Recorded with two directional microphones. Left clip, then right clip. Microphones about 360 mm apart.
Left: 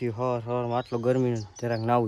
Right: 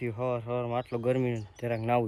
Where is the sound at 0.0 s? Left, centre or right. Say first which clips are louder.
Left 3 dB; centre.